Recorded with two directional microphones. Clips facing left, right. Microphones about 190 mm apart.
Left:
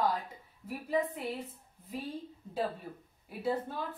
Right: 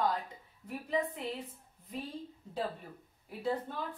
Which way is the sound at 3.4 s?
5° left (ahead or behind).